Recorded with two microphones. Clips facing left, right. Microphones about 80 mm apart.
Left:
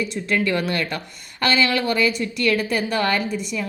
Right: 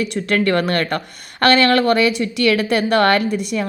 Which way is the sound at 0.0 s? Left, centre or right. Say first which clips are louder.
Right 4 dB; right.